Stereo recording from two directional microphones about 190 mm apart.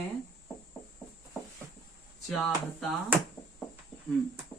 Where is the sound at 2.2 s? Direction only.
Centre (ahead or behind).